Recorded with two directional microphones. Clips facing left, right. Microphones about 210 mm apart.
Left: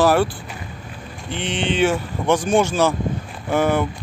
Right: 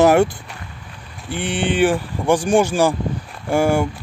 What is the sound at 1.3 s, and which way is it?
Speech, 10° right (ahead or behind).